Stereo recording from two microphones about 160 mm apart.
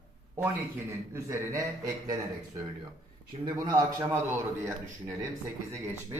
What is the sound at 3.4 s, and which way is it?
Speech, 20° right (ahead or behind).